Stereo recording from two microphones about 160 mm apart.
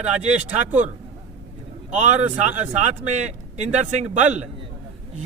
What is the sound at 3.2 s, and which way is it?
Speech, 45° right (ahead or behind).